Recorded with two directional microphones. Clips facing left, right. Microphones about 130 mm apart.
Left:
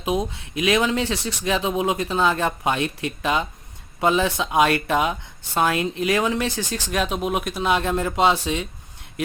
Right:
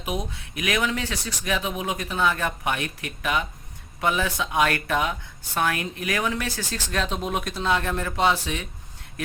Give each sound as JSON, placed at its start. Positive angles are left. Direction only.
{"t": 0.0, "sound": "speech", "side_deg": 25}